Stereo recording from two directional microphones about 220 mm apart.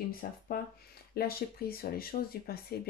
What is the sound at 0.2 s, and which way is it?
Speech, 45° left (ahead or behind).